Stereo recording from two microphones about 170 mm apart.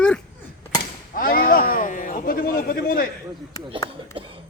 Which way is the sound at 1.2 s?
55° left (ahead or behind).